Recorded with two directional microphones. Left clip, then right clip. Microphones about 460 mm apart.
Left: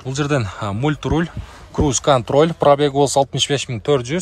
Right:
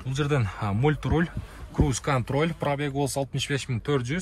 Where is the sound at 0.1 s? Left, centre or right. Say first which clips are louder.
Left 7 dB; centre.